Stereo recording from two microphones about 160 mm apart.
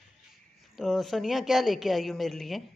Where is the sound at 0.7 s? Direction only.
Centre (ahead or behind).